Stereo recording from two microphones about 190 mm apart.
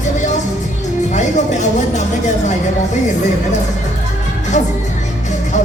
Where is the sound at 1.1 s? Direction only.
40° left (ahead or behind).